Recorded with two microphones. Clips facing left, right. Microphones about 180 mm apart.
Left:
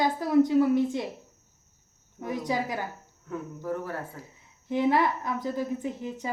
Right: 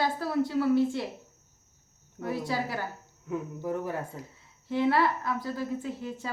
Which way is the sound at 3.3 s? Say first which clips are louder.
Right 1 dB; 15° right (ahead or behind).